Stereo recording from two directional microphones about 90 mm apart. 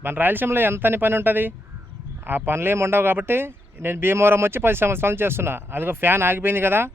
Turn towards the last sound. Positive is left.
turn(degrees=-25)  # may be behind; listen again after turning